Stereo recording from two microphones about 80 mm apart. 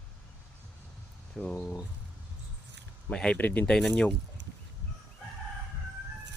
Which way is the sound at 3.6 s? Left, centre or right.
Centre.